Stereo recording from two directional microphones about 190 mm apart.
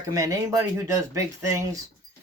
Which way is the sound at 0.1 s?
20° right (ahead or behind).